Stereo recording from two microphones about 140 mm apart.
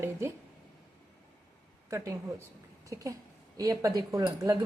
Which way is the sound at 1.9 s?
20° right (ahead or behind).